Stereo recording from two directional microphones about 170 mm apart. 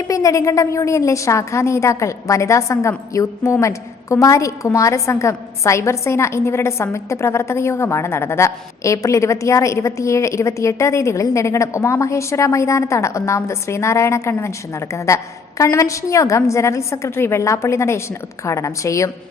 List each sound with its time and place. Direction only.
0.1 s a woman's voice: 20° left (ahead or behind)